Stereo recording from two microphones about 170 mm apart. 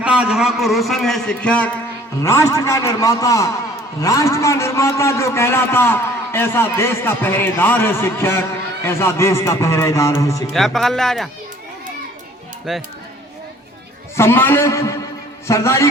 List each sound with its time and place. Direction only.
0.0 s a man's voice: 5° right (ahead or behind)
2.2 s a man's voice: 20° left (ahead or behind)
10.5 s a man's voice: centre (ahead or behind)
12.7 s a man's voice: centre (ahead or behind)
14.2 s a man's voice: 15° left (ahead or behind)